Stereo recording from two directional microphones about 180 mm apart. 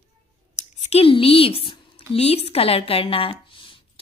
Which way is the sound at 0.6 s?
40° left (ahead or behind).